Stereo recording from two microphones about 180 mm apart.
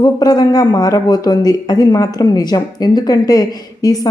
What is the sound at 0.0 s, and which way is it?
Speech, 20° left (ahead or behind).